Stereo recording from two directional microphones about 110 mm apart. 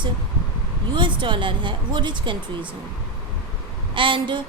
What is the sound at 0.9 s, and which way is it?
A woman's voice, 45° right (ahead or behind).